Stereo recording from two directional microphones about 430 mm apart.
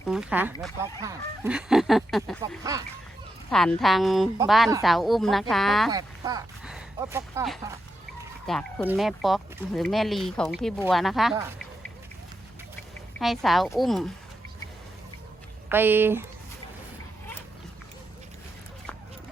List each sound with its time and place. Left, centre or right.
0.0 s a woman's voice: centre
13.1 s a woman's voice: centre
15.7 s a woman's voice: centre